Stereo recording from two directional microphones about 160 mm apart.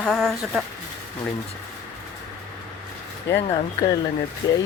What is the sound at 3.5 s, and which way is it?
Speech, 35° left (ahead or behind).